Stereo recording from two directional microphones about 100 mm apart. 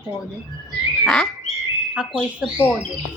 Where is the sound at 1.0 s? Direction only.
5° left (ahead or behind).